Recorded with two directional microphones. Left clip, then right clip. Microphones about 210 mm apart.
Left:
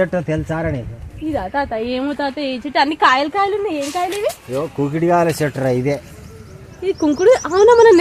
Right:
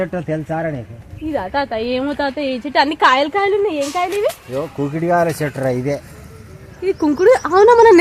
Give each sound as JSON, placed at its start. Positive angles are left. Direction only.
{"t": 0.0, "sound": "speech", "side_deg": 40}
{"t": 1.3, "sound": "a woman's voice", "side_deg": 0}
{"t": 4.5, "sound": "speech", "side_deg": 40}
{"t": 6.8, "sound": "a woman's voice", "side_deg": -15}